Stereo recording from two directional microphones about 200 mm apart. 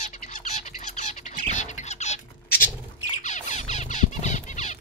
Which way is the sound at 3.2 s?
35° left (ahead or behind).